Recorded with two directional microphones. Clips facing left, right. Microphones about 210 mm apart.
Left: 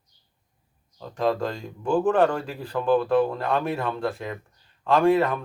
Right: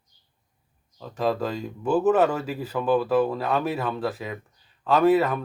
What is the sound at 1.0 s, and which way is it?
Speech, 5° right (ahead or behind).